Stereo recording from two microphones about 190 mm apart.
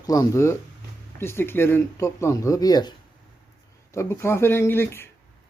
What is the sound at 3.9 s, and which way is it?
Speech, 15° left (ahead or behind).